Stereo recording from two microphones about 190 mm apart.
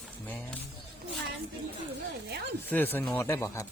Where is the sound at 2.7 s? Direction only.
10° left (ahead or behind).